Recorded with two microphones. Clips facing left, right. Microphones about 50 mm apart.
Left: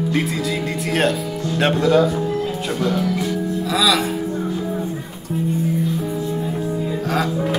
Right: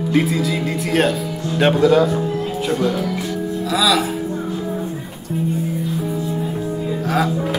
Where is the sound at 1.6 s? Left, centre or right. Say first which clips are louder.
Right 2 dB; centre.